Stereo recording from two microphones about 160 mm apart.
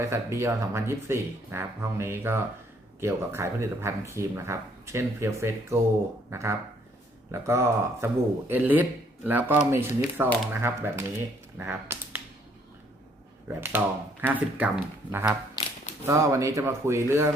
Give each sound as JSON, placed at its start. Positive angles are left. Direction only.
{"t": 0.0, "sound": "speech", "side_deg": -15}
{"t": 13.6, "sound": "speech", "side_deg": -10}